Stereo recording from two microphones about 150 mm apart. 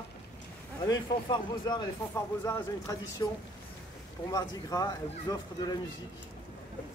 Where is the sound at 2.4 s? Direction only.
15° left (ahead or behind).